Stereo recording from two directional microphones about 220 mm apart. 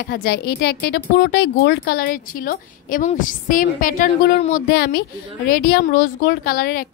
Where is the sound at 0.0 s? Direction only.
45° left (ahead or behind).